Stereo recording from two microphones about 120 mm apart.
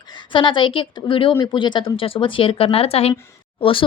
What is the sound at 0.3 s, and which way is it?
A woman's voice, 45° left (ahead or behind).